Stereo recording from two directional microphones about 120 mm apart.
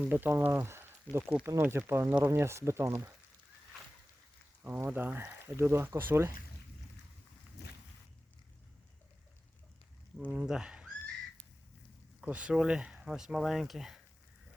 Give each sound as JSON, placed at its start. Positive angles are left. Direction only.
{"t": 0.1, "sound": "speech", "side_deg": -20}
{"t": 4.6, "sound": "speech", "side_deg": -15}
{"t": 10.2, "sound": "speech", "side_deg": -10}
{"t": 12.2, "sound": "speech", "side_deg": -10}